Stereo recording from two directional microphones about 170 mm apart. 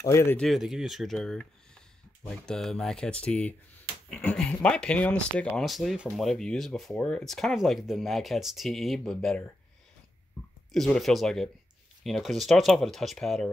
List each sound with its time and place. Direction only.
0.0 s speech: 15° left (ahead or behind)
0.4 s speech: centre (ahead or behind)
10.7 s speech: centre (ahead or behind)